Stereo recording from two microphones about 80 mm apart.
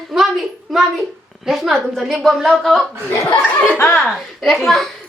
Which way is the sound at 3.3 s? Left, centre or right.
Left.